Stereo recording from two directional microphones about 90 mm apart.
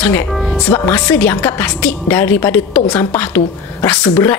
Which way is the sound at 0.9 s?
20° left (ahead or behind).